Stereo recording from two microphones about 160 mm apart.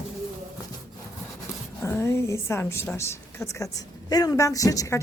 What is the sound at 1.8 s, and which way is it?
A woman's voice, 15° left (ahead or behind).